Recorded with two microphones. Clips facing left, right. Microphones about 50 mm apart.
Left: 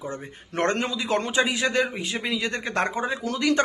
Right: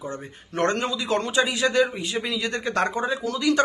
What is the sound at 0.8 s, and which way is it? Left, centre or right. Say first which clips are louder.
Speech: right 1 dB; centre.